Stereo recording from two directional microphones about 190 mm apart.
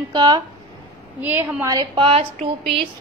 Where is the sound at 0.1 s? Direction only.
25° right (ahead or behind).